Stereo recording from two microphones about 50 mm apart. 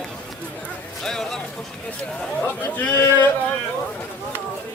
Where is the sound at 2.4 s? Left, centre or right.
Left.